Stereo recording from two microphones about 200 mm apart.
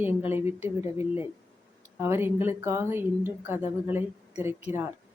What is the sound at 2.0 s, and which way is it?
A woman's voice, 10° right (ahead or behind).